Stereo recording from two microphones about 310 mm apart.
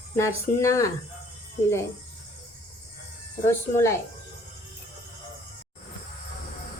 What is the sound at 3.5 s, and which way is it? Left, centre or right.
Speech, centre.